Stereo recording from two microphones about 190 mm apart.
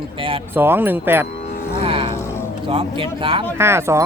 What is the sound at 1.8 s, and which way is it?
Music, 30° right (ahead or behind).